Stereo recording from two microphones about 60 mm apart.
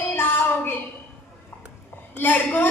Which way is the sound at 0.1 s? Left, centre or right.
Left.